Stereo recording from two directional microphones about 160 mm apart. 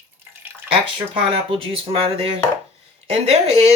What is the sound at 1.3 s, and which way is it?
Speech, 35° right (ahead or behind).